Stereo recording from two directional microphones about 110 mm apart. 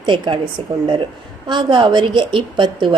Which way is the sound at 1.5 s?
45° right (ahead or behind).